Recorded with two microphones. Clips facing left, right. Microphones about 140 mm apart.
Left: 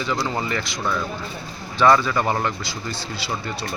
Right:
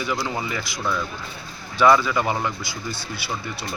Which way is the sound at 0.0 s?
5° right (ahead or behind).